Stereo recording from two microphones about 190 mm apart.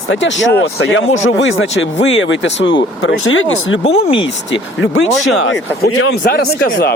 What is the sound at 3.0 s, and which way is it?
Speech, 90° left.